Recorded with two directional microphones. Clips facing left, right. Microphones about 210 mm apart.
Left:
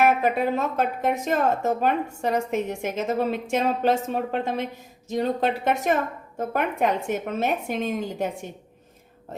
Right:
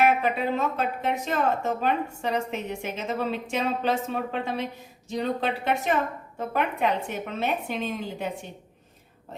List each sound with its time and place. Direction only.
0.0 s a woman's voice: 45° left (ahead or behind)